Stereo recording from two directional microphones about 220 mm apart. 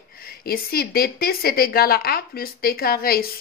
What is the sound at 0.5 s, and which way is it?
Speech, 45° left (ahead or behind).